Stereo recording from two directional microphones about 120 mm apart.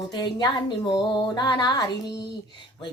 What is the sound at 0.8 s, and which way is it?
A woman's voice, 40° left (ahead or behind).